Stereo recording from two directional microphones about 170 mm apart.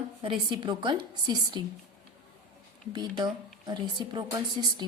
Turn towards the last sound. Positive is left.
turn(degrees=-25)  # may be behind; listen again after turning